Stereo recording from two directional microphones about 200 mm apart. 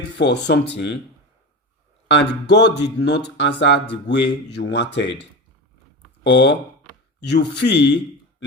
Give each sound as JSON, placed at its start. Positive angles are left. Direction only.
{"t": 0.2, "sound": "speech", "side_deg": 60}
{"t": 2.0, "sound": "speech", "side_deg": 60}
{"t": 6.2, "sound": "speech", "side_deg": 60}